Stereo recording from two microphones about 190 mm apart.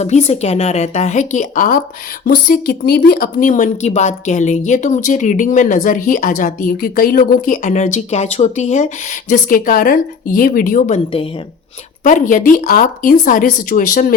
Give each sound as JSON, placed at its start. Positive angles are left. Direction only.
{"t": 0.0, "sound": "speech", "side_deg": 35}